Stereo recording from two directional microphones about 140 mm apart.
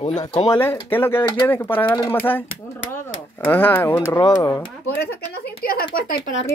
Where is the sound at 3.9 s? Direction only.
30° left (ahead or behind).